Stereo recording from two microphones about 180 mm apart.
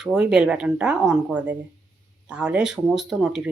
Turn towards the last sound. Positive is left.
turn(degrees=-5)  # may be behind; listen again after turning